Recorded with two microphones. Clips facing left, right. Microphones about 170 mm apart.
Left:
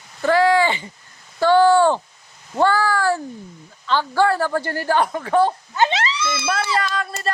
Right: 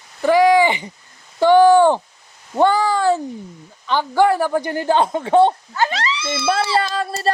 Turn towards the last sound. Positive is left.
turn(degrees=-30)  # may be behind; listen again after turning